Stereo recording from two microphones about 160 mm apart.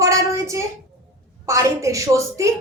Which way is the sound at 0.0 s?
20° right (ahead or behind).